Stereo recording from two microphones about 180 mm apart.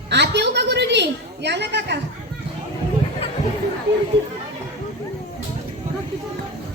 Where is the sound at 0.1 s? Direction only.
70° right (ahead or behind).